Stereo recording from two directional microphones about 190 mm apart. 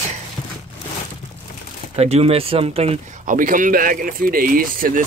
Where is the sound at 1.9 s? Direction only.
35° right (ahead or behind).